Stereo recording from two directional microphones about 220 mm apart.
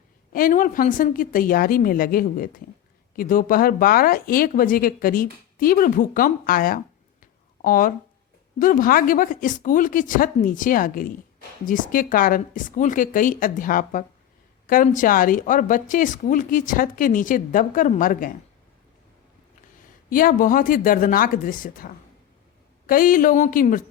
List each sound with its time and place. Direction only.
0.3 s speech: 40° left (ahead or behind)
20.1 s speech: 40° left (ahead or behind)